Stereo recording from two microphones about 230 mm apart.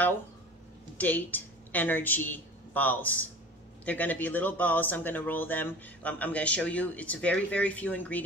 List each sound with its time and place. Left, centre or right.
0.9 s a woman's voice: centre